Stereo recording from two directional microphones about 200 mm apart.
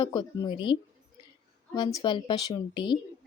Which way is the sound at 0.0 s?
25° left (ahead or behind).